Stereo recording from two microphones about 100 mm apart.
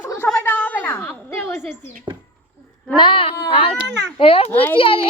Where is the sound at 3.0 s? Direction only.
60° left (ahead or behind).